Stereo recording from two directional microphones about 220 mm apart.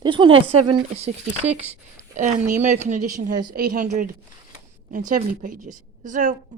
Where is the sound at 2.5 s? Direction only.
30° right (ahead or behind).